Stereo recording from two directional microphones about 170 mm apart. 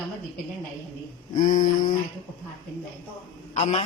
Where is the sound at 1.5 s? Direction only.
50° left (ahead or behind).